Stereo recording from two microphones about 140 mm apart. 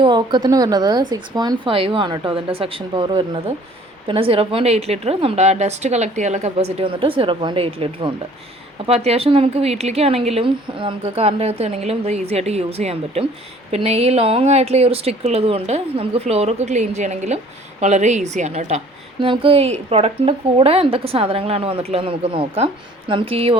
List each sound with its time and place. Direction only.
0.0 s speech: 35° right (ahead or behind); by 18.8 s 55° right (ahead or behind)
19.2 s speech: 40° right (ahead or behind)